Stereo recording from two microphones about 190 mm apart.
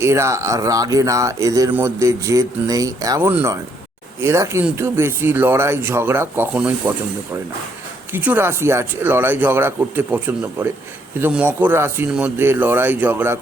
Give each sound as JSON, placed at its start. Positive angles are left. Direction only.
{"t": 0.0, "sound": "speech", "side_deg": -15}
{"t": 8.1, "sound": "speech", "side_deg": -10}